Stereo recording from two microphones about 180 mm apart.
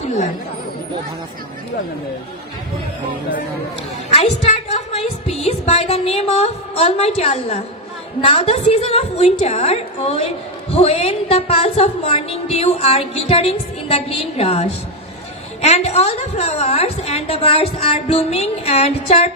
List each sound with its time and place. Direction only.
4.1 s a woman's voice: 35° left (ahead or behind)